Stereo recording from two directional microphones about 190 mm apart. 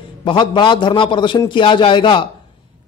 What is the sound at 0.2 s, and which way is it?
Speech, 25° left (ahead or behind).